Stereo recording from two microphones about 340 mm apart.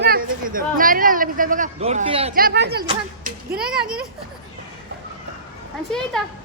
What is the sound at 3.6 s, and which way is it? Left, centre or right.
Speech, centre.